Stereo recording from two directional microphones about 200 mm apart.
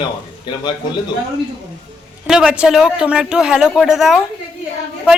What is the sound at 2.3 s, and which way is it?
A man's voice, 5° right (ahead or behind).